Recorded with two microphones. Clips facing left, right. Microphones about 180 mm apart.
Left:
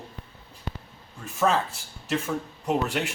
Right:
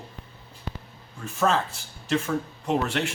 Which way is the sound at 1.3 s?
5° left (ahead or behind).